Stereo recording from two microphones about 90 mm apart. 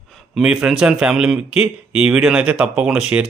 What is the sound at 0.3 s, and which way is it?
A man's voice, 5° right (ahead or behind).